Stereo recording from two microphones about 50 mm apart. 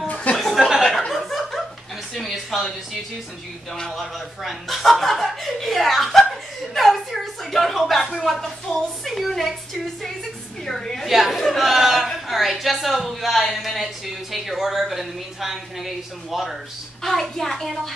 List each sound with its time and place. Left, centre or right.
0.1 s chuckle: left
0.4 s chuckle: centre
2.1 s a sound: centre
3.9 s speech: centre
6.7 s chuckle: centre
8.2 s a woman's voice: centre
10.6 s a sound: centre
11.1 s a woman's voice: centre